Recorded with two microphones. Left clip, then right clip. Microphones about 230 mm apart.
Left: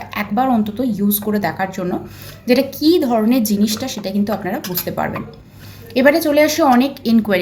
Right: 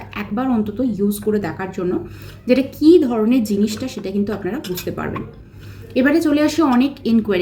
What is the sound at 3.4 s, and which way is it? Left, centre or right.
Speech, left.